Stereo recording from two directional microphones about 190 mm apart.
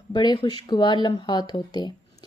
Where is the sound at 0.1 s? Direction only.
25° left (ahead or behind).